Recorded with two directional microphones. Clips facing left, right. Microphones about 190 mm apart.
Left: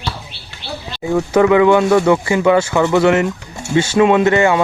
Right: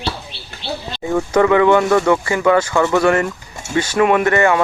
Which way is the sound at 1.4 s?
15° left (ahead or behind).